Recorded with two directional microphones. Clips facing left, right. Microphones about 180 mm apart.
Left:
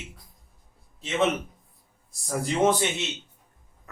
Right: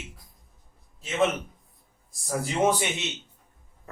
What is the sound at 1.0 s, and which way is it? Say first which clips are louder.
A man's voice: even; centre (ahead or behind).